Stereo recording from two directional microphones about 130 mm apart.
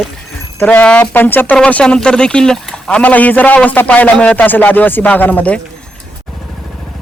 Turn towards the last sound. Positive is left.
turn(degrees=10)  # may be behind; listen again after turning